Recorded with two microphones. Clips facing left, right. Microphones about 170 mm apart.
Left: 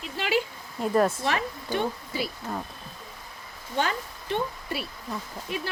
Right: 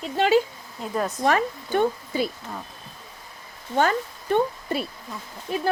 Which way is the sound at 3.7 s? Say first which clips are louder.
Right 6 dB; 50° right (ahead or behind).